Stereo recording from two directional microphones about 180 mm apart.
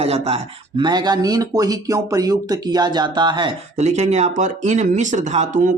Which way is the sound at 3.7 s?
40° right (ahead or behind).